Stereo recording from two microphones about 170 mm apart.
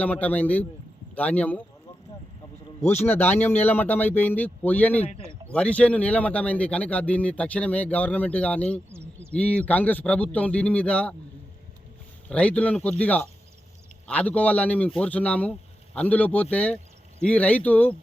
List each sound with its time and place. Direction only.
0.0 s a man's voice: 10° left (ahead or behind)
3.1 s a man's voice: 10° left (ahead or behind)
5.0 s a man's voice: 35° left (ahead or behind)
5.5 s a man's voice: 5° left (ahead or behind)
12.3 s a man's voice: 5° left (ahead or behind)